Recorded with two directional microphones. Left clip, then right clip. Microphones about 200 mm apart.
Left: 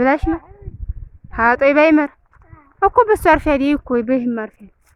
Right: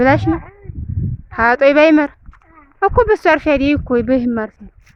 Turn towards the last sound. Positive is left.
turn(degrees=-20)  # may be behind; listen again after turning